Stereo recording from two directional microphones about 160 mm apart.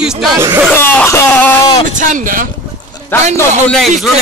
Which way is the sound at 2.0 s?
55° right (ahead or behind).